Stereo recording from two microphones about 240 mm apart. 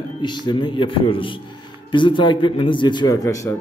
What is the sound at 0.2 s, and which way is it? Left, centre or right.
A man's voice, centre.